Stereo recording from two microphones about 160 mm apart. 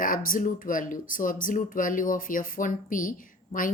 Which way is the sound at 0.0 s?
60° left (ahead or behind).